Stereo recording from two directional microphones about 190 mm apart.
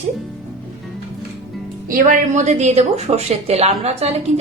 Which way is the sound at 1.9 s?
40° right (ahead or behind).